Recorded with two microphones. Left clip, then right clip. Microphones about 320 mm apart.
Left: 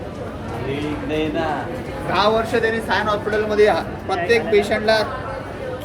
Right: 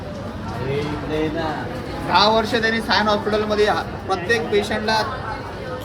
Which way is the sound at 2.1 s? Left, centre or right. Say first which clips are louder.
Right 1 dB; right.